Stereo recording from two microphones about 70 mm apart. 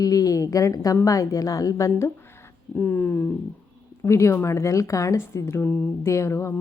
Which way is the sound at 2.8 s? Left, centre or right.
Left.